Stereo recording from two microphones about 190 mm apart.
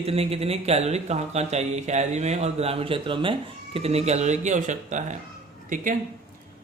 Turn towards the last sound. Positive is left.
turn(degrees=-45)  # may be behind; listen again after turning